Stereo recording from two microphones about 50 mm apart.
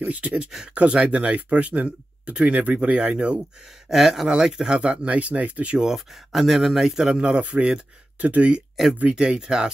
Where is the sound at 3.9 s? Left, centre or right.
Centre; by 5.7 s right.